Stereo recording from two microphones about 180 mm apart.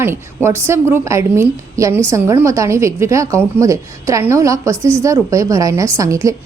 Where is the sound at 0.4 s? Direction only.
15° right (ahead or behind).